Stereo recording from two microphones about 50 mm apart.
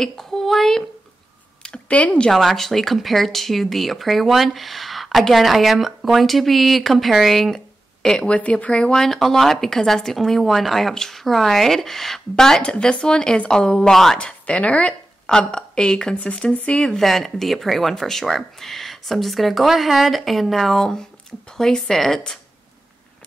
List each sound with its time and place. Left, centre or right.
0.0 s speech: centre
1.6 s a sound: centre
2.0 s speech: left
2.3 s speech: centre
8.4 s speech: left
8.7 s speech: centre
14.1 s a woman's voice: left
16.2 s speech: left
16.8 s speech: centre